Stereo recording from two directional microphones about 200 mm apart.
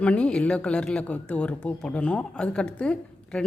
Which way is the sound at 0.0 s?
5° left (ahead or behind).